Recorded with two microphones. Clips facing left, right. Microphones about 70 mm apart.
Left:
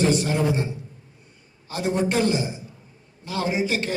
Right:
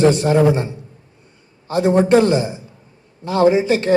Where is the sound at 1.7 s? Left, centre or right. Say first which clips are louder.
Right 10 dB; right.